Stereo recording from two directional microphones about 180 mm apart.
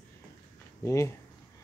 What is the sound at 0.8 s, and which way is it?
Speech, 15° left (ahead or behind).